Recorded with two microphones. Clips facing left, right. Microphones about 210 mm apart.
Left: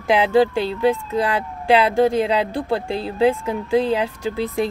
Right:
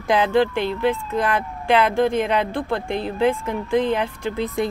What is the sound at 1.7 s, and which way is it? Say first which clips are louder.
Speech: left 2 dB; 35° left (ahead or behind).